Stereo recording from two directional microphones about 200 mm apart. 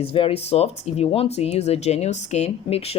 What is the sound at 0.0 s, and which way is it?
Speech, 30° left (ahead or behind).